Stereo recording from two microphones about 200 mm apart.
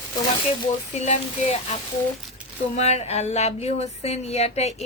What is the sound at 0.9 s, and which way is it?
Speech, 35° left (ahead or behind).